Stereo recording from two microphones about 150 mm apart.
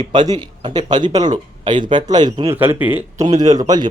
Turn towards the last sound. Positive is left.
turn(degrees=-25)  # may be behind; listen again after turning